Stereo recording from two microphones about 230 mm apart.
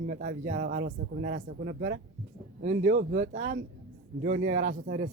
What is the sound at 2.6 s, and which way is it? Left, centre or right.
Speech, right.